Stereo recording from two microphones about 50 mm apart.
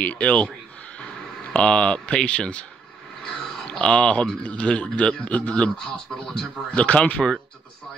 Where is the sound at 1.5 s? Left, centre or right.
Left.